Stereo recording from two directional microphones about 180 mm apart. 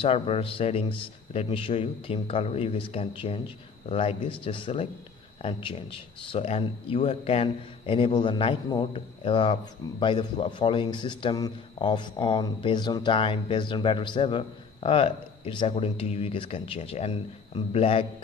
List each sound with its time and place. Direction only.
0.0 s a man's voice: 30° left (ahead or behind)